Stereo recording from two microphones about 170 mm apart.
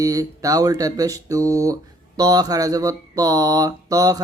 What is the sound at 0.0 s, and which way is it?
Speech, 20° right (ahead or behind).